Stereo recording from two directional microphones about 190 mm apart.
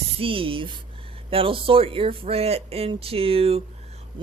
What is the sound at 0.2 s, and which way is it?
Speech, 30° right (ahead or behind).